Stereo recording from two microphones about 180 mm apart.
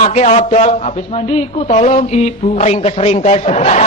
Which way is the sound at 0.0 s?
35° left (ahead or behind).